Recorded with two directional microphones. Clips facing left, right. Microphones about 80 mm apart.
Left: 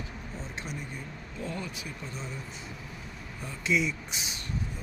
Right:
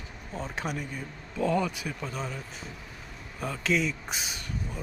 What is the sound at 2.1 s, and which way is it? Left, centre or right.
Speech, right.